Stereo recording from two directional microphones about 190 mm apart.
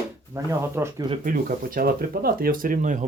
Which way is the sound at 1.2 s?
45° right (ahead or behind).